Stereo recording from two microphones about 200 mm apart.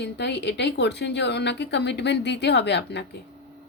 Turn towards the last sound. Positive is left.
turn(degrees=55)  # may be behind; listen again after turning